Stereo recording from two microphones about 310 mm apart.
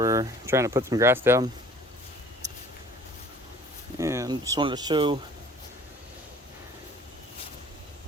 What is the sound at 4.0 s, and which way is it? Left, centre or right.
Speech, centre.